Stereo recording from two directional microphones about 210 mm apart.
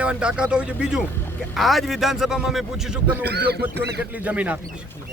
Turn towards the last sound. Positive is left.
turn(degrees=-5)  # may be behind; listen again after turning